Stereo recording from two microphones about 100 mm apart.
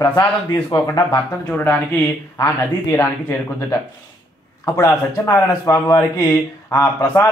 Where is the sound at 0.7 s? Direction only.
55° left (ahead or behind).